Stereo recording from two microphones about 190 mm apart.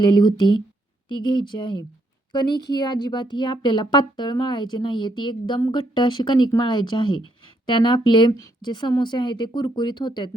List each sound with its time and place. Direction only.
0.0 s a child's voice: 25° left (ahead or behind)